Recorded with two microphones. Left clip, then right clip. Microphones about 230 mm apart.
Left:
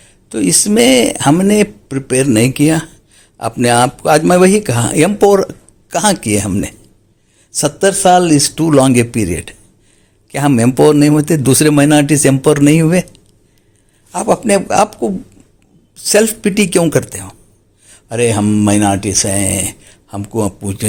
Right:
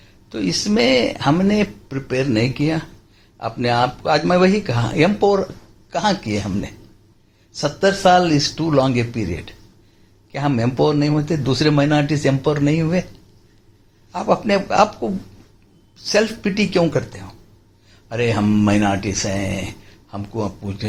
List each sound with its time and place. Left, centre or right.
0.3 s a man's voice: left